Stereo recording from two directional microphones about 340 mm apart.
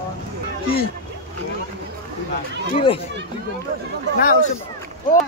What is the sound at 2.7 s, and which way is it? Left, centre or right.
Speech, centre.